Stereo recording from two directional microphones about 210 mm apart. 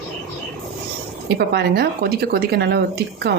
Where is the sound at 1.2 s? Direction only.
50° right (ahead or behind).